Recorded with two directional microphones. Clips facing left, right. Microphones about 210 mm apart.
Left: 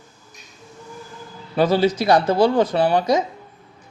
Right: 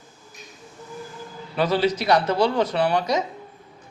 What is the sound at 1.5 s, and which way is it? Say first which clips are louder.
Speech: left 4 dB; 40° left (ahead or behind).